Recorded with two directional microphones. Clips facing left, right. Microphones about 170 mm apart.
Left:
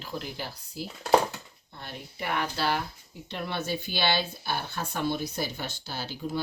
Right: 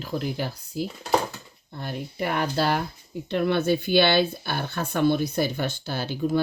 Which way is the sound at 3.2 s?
55° right (ahead or behind).